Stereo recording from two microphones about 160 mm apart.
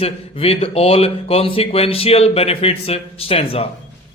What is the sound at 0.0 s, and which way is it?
Speech, 35° left (ahead or behind).